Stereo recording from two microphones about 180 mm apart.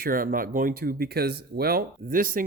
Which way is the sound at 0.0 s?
50° right (ahead or behind).